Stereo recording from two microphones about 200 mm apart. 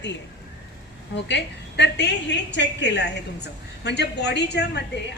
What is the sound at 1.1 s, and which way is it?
A woman's voice, 60° left (ahead or behind).